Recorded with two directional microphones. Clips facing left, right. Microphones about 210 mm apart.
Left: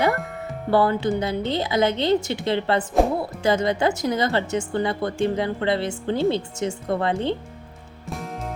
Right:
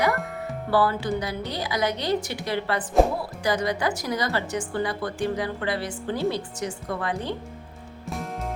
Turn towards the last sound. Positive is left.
turn(degrees=25)  # may be behind; listen again after turning